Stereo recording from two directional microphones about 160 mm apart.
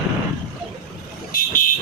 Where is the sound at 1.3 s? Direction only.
60° left (ahead or behind).